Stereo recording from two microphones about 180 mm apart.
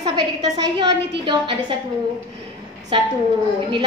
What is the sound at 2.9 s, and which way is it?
Speech, 30° right (ahead or behind).